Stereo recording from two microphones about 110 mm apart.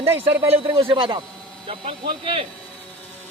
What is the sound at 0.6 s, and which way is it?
Speech, 55° right (ahead or behind).